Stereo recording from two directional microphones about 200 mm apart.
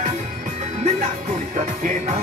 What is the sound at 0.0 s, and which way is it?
Music, 40° right (ahead or behind).